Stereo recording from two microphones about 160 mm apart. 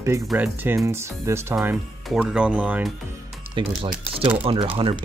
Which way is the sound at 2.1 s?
5° right (ahead or behind).